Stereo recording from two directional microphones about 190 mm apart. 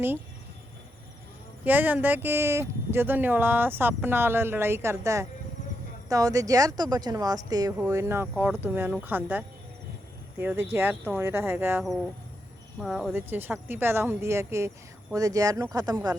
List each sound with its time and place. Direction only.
1.6 s speech: 10° right (ahead or behind)
11.8 s speech: centre (ahead or behind)
13.1 s speech: 10° right (ahead or behind)